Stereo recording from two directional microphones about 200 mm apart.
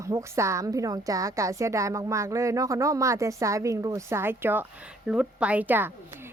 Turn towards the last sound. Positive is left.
turn(degrees=-10)  # may be behind; listen again after turning